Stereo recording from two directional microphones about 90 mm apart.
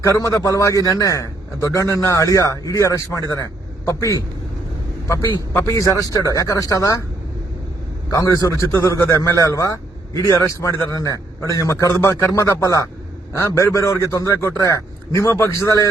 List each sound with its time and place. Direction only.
0.1 s a man's voice: 35° left (ahead or behind)
8.1 s a man's voice: 40° left (ahead or behind)